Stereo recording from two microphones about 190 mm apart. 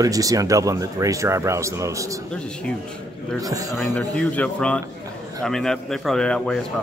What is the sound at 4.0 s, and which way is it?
A man's voice, 5° left (ahead or behind).